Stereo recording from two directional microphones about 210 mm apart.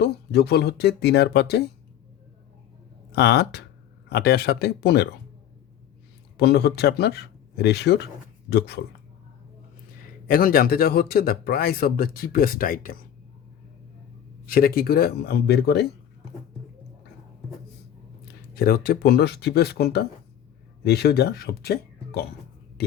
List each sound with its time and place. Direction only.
0.0 s speech: 50° left (ahead or behind)
3.1 s speech: 50° left (ahead or behind)
6.3 s speech: 50° left (ahead or behind)
10.2 s speech: 45° left (ahead or behind)
14.4 s speech: 45° left (ahead or behind)
18.5 s speech: 45° left (ahead or behind)